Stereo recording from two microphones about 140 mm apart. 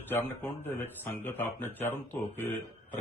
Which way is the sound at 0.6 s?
15° left (ahead or behind).